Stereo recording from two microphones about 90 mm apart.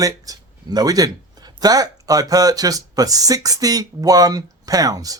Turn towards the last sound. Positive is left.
turn(degrees=-40)  # may be behind; listen again after turning